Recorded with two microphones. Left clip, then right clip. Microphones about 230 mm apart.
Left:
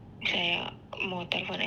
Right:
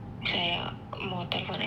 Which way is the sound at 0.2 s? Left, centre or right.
Left.